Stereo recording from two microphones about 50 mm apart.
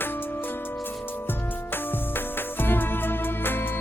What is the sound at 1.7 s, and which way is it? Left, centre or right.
Music, left.